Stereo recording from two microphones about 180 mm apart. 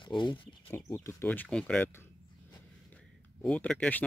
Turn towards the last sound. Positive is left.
turn(degrees=5)  # may be behind; listen again after turning